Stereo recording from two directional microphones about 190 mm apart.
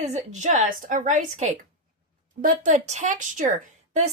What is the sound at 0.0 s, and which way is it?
A woman's voice, 35° right (ahead or behind).